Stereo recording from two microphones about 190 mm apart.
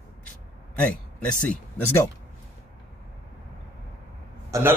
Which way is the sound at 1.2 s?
10° left (ahead or behind).